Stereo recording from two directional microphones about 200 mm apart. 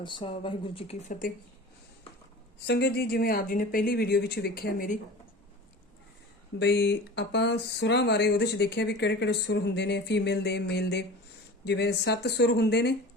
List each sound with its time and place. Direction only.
0.0 s speech: 25° left (ahead or behind)
2.6 s speech: 55° left (ahead or behind)
6.6 s speech: 60° left (ahead or behind)